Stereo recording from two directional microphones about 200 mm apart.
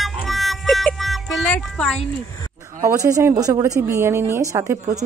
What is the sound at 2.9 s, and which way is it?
A woman's voice, 15° right (ahead or behind).